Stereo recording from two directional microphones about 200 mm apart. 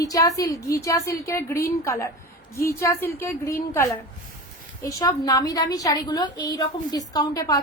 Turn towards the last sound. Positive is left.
turn(degrees=20)  # may be behind; listen again after turning